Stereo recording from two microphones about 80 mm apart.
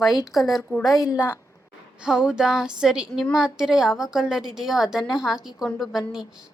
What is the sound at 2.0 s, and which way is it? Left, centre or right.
A woman's voice, centre.